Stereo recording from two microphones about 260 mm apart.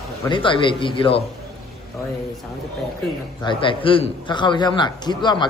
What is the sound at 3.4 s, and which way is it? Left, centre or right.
A man's voice, centre.